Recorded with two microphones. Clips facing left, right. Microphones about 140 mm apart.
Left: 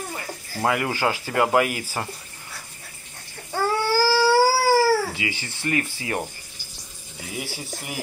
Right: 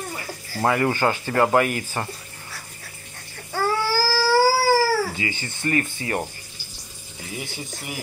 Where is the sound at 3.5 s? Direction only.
20° left (ahead or behind).